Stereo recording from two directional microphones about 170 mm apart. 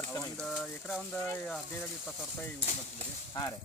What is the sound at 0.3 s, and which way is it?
Speech, 5° left (ahead or behind).